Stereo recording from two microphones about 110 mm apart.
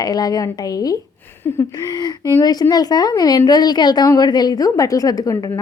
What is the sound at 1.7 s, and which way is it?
A woman's voice, 35° left (ahead or behind).